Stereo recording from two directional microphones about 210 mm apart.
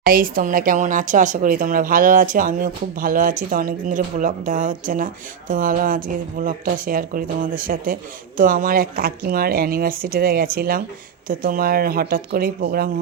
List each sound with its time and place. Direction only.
0.0 s a woman's voice: 45° right (ahead or behind)